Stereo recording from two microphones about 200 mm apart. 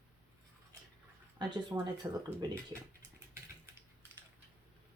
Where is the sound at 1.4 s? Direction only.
20° right (ahead or behind).